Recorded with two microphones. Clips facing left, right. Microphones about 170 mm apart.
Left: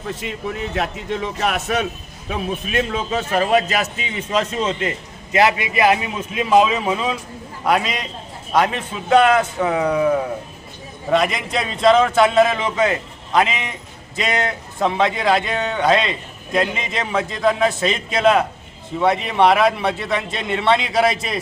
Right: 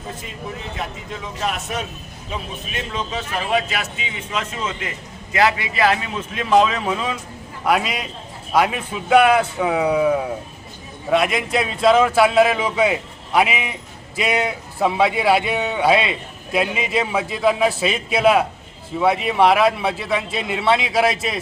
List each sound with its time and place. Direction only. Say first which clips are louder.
0.0 s a man's voice: left 5 dB; 75° left (ahead or behind)
2.3 s a man's voice: left 7 dB; 55° left (ahead or behind); by 4.9 s 35° left (ahead or behind)
5.3 s a man's voice: left 2 dB; 20° left (ahead or behind); by 21.4 s 5° right (ahead or behind)